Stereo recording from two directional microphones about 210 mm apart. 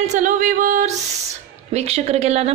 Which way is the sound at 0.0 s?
35° right (ahead or behind).